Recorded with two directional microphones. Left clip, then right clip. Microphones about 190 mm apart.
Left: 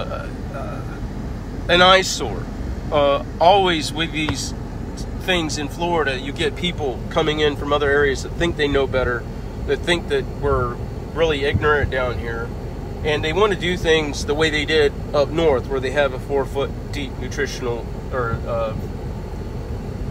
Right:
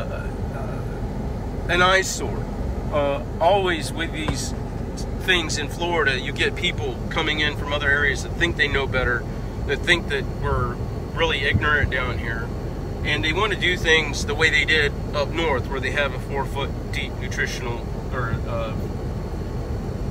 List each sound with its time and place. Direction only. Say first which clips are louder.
1.7 s speech: left 5 dB; centre (ahead or behind); by 12.2 s 25° left (ahead or behind)
13.5 s speech: left 1 dB; 30° left (ahead or behind)